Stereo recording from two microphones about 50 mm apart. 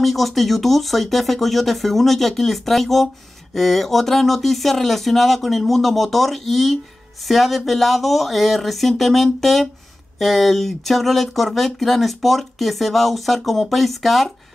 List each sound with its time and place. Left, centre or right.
0.0 s speech: centre